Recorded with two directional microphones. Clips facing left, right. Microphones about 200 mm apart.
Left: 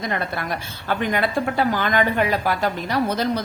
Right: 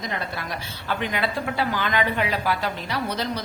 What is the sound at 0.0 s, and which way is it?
A woman's voice, 55° left (ahead or behind).